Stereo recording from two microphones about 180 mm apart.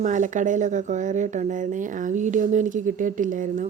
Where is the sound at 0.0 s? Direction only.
45° right (ahead or behind).